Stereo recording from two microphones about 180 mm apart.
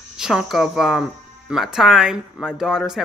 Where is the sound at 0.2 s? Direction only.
Centre (ahead or behind).